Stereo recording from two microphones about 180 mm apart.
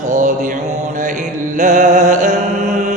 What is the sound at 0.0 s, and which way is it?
Mantra, 45° right (ahead or behind).